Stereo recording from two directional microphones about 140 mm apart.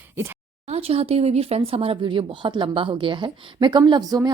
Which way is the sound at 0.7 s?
45° right (ahead or behind).